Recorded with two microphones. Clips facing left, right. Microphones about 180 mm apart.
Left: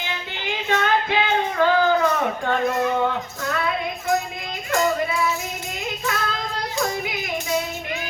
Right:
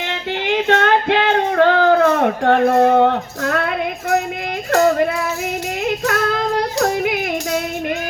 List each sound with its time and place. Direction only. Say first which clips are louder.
0.0 s female singing: right 8 dB; 65° right (ahead or behind)
4.7 s music: right 7 dB; 65° right (ahead or behind)
5.8 s yodeling: right 8 dB; 65° right (ahead or behind)